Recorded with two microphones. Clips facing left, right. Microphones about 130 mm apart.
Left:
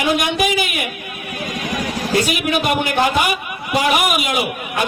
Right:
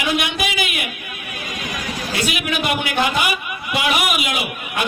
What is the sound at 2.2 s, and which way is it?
A man's voice, 45° left (ahead or behind).